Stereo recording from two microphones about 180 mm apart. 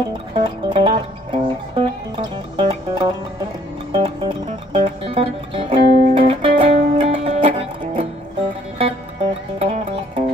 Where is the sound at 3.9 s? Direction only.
25° right (ahead or behind).